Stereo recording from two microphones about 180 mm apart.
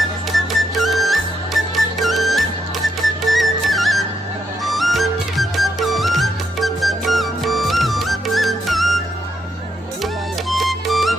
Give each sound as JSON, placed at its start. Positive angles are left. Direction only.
{"t": 0.3, "sound": "music", "side_deg": 0}
{"t": 10.5, "sound": "music", "side_deg": 0}